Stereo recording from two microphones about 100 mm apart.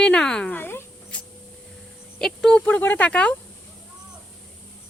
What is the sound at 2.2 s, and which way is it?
Speech, 5° left (ahead or behind).